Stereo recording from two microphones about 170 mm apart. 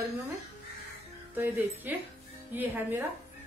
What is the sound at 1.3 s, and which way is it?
A woman's voice, 10° right (ahead or behind).